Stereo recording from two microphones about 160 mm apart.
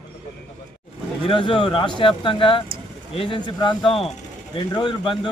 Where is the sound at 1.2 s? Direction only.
35° left (ahead or behind).